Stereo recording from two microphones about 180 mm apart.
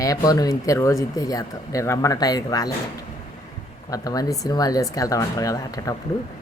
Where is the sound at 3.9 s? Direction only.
20° left (ahead or behind).